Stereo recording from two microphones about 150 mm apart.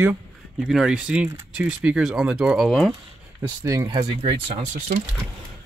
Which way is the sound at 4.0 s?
40° right (ahead or behind).